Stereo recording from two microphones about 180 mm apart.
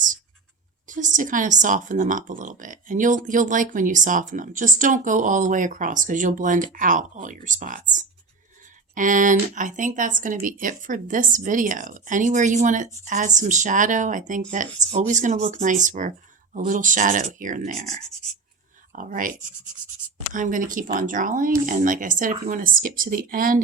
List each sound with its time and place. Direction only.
0.9 s speech: 45° right (ahead or behind)
20.3 s speech: 45° right (ahead or behind)